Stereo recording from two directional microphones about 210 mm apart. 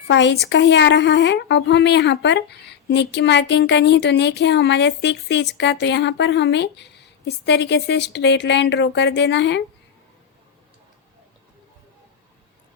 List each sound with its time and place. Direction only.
0.1 s speech: 55° left (ahead or behind)